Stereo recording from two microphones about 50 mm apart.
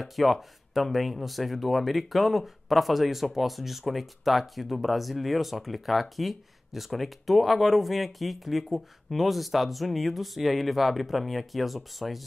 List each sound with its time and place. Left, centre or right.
0.0 s speech: centre